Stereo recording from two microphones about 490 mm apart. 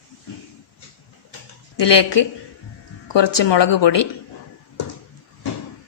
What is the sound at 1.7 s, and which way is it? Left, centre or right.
Speech, left.